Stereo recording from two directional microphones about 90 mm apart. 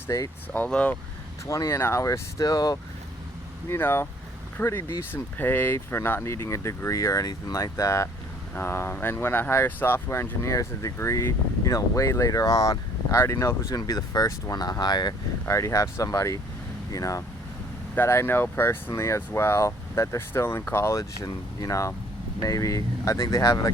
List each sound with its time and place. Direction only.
0.5 s speech: 15° left (ahead or behind)
1.5 s speech: 35° left (ahead or behind)
3.7 s speech: 25° left (ahead or behind)
13.7 s speech: 40° left (ahead or behind)
15.4 s speech: 35° left (ahead or behind)
17.9 s speech: 25° left (ahead or behind)